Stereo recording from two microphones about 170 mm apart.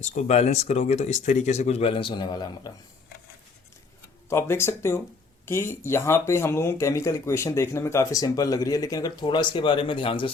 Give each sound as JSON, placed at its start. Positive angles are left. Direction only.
{"t": 0.0, "sound": "speech", "side_deg": 45}
{"t": 4.3, "sound": "speech", "side_deg": 15}